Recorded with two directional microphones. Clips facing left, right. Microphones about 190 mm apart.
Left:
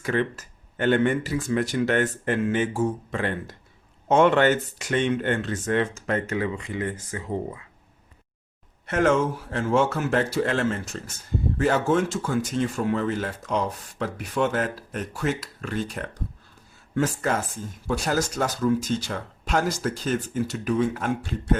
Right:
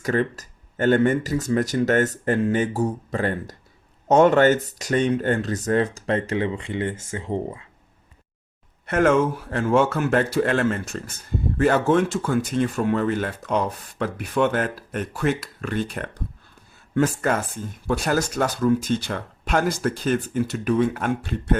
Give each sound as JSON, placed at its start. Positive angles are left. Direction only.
{"t": 0.0, "sound": "speech", "side_deg": -40}
{"t": 9.5, "sound": "speech", "side_deg": -55}